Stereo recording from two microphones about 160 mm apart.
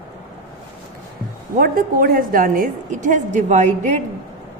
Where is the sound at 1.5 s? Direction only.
65° right (ahead or behind); by 3.7 s 50° right (ahead or behind).